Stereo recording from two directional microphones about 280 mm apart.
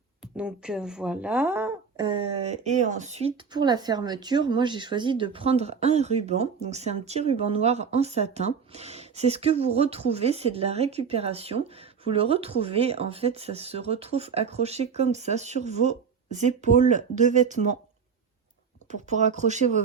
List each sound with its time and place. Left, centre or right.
0.2 s speech: centre; by 17.7 s right
18.9 s speech: right